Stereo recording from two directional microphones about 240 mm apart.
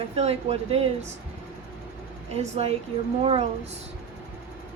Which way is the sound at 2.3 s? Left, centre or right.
Right.